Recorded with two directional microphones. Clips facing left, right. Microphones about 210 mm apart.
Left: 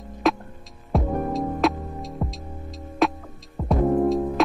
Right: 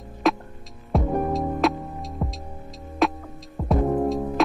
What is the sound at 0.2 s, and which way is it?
Music, centre (ahead or behind).